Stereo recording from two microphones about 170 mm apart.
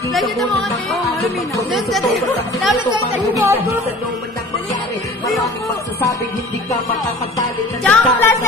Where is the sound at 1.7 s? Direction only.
Centre (ahead or behind).